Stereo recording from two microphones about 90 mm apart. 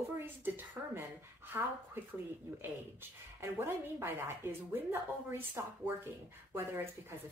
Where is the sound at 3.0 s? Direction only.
25° right (ahead or behind).